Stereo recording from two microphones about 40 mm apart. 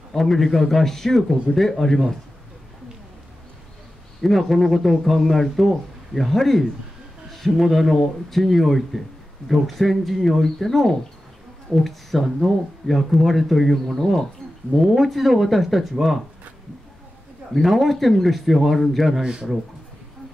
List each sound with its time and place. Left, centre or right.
0.1 s speech: centre
4.2 s speech: centre
17.6 s speech: centre
19.2 s a man's voice: centre